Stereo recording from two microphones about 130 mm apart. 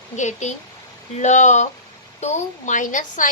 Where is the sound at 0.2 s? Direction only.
65° left (ahead or behind).